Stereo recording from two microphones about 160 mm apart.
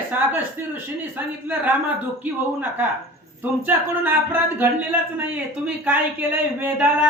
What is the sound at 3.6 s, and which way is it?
Speech, 10° right (ahead or behind).